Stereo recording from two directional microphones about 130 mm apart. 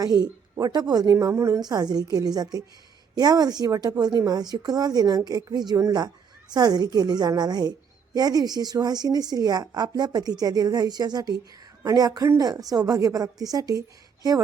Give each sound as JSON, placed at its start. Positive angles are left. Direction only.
{"t": 0.2, "sound": "a woman's voice", "side_deg": -30}